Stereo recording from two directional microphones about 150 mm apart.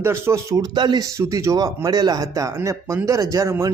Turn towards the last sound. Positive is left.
turn(degrees=-20)  # may be behind; listen again after turning